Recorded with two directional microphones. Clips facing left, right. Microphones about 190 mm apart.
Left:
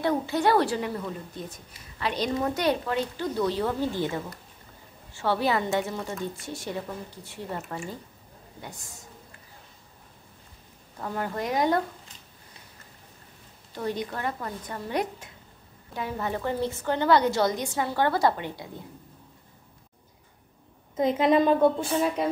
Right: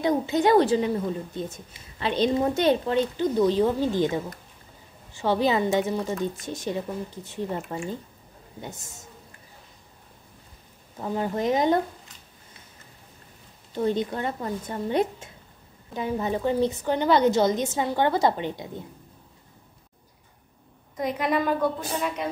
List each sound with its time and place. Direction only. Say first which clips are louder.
0.0 s a woman's voice: right 2 dB; 20° right (ahead or behind)
11.0 s a woman's voice: right 4 dB; 15° right (ahead or behind)
13.7 s a woman's voice: right 6 dB; 25° right (ahead or behind)
20.9 s a woman's voice: left 4 dB; 25° left (ahead or behind)